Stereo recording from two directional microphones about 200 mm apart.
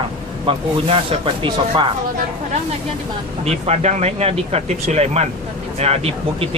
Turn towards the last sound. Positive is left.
turn(degrees=-30)  # may be behind; listen again after turning